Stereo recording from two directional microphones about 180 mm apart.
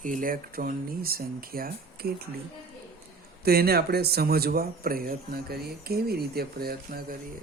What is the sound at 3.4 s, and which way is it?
A man's voice, 60° right (ahead or behind).